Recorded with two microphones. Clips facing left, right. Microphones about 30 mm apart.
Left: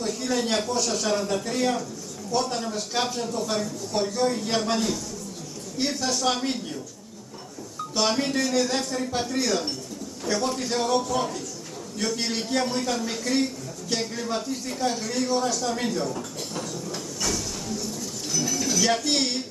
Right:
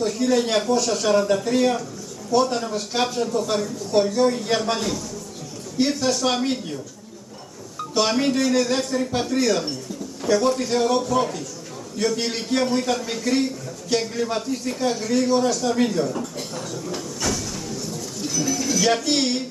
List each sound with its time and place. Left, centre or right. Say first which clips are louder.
0.2 s a man's voice: right 6 dB; right
7.9 s a man's voice: right 4 dB; centre
10.5 s a man's voice: right 4 dB; centre
18.2 s a sound: right 3 dB; centre
18.6 s speech: right 3 dB; centre